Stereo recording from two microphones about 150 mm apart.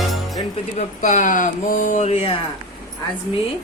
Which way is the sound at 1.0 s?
60° left (ahead or behind).